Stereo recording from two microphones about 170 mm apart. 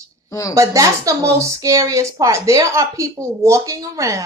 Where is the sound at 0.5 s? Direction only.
20° right (ahead or behind).